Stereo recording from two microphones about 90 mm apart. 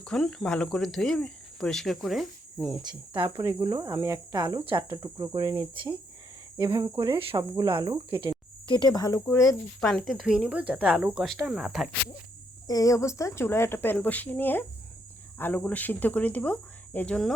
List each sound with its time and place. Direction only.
0.0 s speech: 5° left (ahead or behind)
3.1 s speech: 70° right (ahead or behind)
3.6 s cricket: 55° right (ahead or behind)
3.8 s cricket: 35° right (ahead or behind)
4.4 s cricket: 55° right (ahead or behind)
5.0 s cricket: 35° right (ahead or behind)
5.3 s cricket: 55° right (ahead or behind); by 7.3 s 80° right
7.3 s cricket: 50° right (ahead or behind)
7.7 s cricket: 60° right (ahead or behind)
8.6 s speech: 60° left (ahead or behind); by 9.6 s 35° left (ahead or behind)
10.1 s a woman's voice: 5° right (ahead or behind)
11.1 s speech: centre (ahead or behind)
12.6 s speech: 40° left (ahead or behind); by 17.2 s 15° left (ahead or behind)